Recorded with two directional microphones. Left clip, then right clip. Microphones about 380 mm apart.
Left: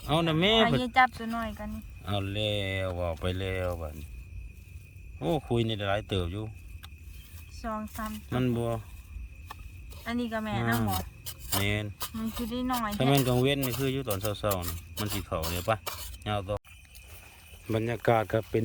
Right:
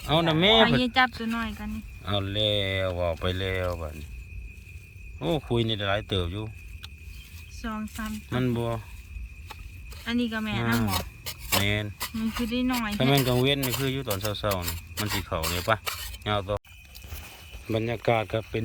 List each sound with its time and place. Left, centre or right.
0.0 s speech: centre
0.8 s speech: centre
2.0 s speech: centre
5.2 s speech: centre
7.6 s speech: centre
10.0 s speech: centre
10.6 s speech: centre
12.2 s speech: centre
13.0 s speech: centre
17.7 s speech: centre